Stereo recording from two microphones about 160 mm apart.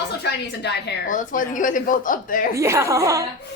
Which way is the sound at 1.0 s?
55° left (ahead or behind).